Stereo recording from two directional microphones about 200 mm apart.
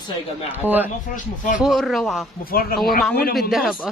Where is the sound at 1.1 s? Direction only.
40° left (ahead or behind).